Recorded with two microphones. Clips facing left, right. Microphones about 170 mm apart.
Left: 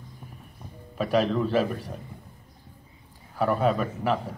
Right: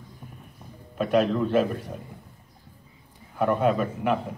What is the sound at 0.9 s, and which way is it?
Speech, 5° left (ahead or behind).